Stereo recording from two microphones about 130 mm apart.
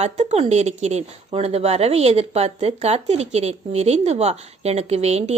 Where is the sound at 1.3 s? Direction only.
50° right (ahead or behind).